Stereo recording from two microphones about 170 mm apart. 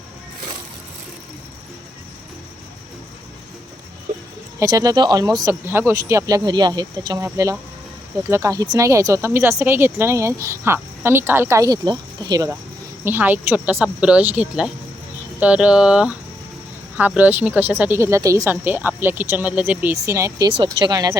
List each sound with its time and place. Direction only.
4.6 s speech: 20° right (ahead or behind)
8.3 s speech: 20° right (ahead or behind)
13.1 s speech: 10° right (ahead or behind)
17.2 s speech: 10° right (ahead or behind)
20.5 s speech: 30° right (ahead or behind)